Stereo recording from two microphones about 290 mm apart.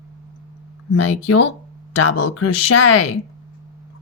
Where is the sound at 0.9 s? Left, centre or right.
Left.